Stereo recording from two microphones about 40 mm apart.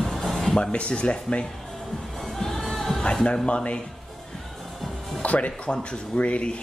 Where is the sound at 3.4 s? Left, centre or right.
Left.